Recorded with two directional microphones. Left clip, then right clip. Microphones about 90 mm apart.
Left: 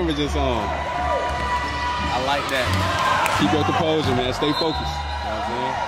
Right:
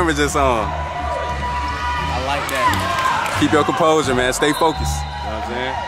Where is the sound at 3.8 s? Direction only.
25° left (ahead or behind).